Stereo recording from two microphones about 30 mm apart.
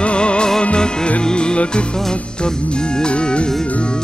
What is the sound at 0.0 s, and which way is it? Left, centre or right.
Music, left.